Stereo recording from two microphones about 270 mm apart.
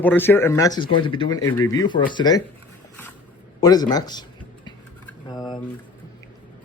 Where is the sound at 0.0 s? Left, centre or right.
Centre.